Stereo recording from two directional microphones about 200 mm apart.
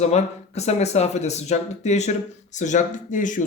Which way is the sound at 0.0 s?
35° left (ahead or behind).